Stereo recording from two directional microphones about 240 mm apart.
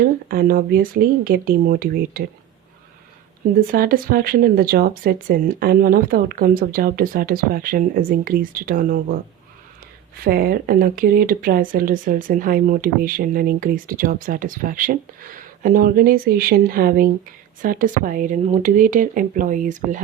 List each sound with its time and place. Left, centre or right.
0.0 s speech: right
3.5 s speech: right
10.2 s speech: right